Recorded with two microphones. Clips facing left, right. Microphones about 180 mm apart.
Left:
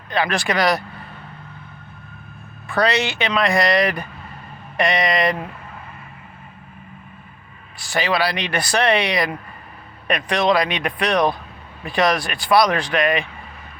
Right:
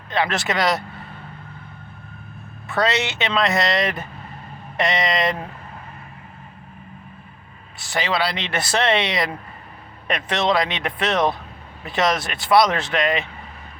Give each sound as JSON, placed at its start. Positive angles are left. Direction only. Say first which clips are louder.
{"t": 0.1, "sound": "speech", "louder": "left 1 dB", "side_deg": -25}
{"t": 2.6, "sound": "speech", "louder": "left 2 dB", "side_deg": -20}
{"t": 7.8, "sound": "speech", "louder": "left 2 dB", "side_deg": -20}